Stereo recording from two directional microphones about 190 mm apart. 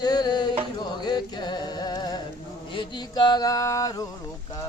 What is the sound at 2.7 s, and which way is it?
Chant, 25° left (ahead or behind).